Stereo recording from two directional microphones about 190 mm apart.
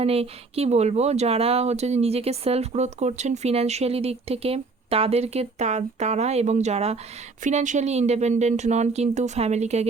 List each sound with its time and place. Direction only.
0.0 s speech: 30° right (ahead or behind)